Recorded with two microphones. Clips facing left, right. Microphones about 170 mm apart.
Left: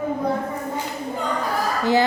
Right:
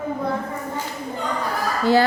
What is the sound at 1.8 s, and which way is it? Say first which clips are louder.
Speech: right 2 dB; 20° left (ahead or behind).